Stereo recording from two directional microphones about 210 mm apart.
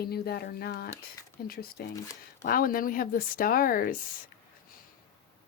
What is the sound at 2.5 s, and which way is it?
Speech, 45° left (ahead or behind).